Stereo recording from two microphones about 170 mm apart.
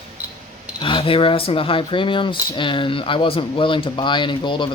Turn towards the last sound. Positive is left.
turn(degrees=30)  # may be behind; listen again after turning